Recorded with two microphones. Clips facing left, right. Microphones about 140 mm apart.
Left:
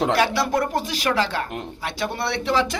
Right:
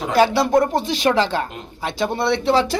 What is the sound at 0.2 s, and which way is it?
Speech, 25° right (ahead or behind).